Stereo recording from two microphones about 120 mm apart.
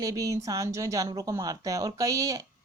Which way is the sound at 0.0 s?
30° right (ahead or behind).